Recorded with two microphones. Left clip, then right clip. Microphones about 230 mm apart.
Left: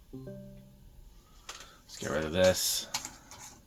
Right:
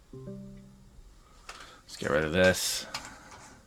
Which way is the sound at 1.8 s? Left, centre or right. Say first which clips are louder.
Right 5 dB; right.